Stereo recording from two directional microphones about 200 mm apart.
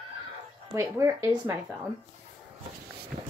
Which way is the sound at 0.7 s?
15° right (ahead or behind).